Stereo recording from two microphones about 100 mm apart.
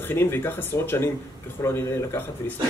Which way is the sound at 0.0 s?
20° left (ahead or behind).